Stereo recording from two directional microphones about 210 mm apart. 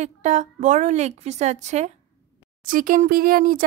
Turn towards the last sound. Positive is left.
turn(degrees=-45)  # may be behind; listen again after turning